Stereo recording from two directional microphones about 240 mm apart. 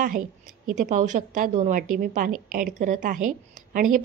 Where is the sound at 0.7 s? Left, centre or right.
Right.